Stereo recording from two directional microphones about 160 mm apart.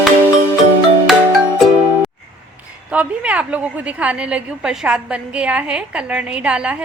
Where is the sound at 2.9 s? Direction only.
10° right (ahead or behind).